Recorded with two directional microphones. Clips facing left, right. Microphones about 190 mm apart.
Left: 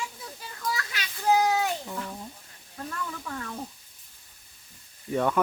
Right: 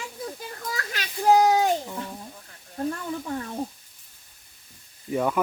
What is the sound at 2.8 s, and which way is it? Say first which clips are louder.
Snake: right 7 dB; 30° right (ahead or behind).